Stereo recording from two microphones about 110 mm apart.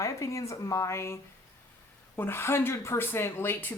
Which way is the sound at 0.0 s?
30° left (ahead or behind).